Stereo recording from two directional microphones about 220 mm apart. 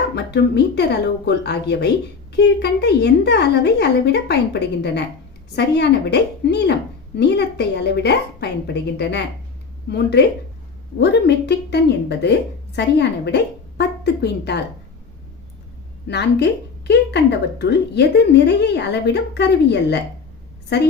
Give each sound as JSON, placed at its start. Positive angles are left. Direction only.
{"t": 0.2, "sound": "a woman's voice", "side_deg": 50}
{"t": 16.0, "sound": "a woman's voice", "side_deg": 50}